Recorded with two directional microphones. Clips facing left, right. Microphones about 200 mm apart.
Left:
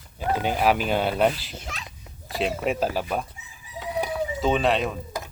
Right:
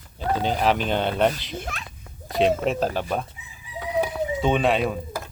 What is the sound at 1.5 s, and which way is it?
Speech, 55° right (ahead or behind).